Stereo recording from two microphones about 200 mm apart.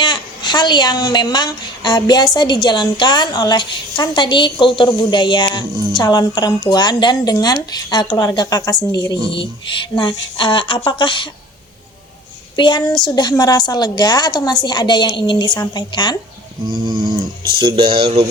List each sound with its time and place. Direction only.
0.0 s a woman's voice: 20° left (ahead or behind)
12.5 s a woman's voice: 25° left (ahead or behind)
16.6 s speech: 20° right (ahead or behind)